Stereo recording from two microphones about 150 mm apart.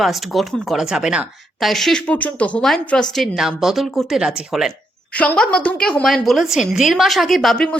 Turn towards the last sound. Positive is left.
turn(degrees=5)  # may be behind; listen again after turning